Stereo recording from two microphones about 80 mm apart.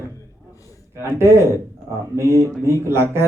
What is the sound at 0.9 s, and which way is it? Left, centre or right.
Speech, right.